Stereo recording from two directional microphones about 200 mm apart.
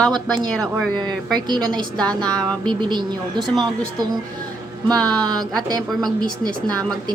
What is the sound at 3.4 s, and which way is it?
Speech, centre (ahead or behind).